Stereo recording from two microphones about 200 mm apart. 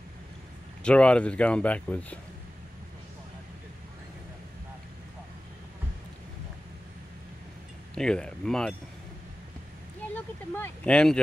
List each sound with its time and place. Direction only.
0.8 s speech: 5° left (ahead or behind)
7.9 s speech: 5° left (ahead or behind)
10.1 s speech: 10° left (ahead or behind)